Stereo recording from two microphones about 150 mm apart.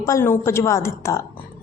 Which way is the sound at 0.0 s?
20° left (ahead or behind).